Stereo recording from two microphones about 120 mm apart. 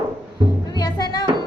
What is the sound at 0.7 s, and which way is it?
Music, 35° left (ahead or behind).